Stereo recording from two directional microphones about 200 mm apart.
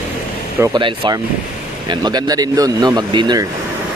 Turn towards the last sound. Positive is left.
turn(degrees=-20)  # may be behind; listen again after turning